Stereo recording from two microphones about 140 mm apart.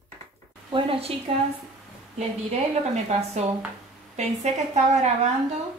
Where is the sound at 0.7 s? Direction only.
40° right (ahead or behind).